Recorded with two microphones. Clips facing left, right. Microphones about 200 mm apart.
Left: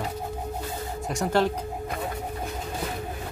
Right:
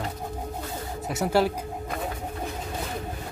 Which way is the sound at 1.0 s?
5° right (ahead or behind).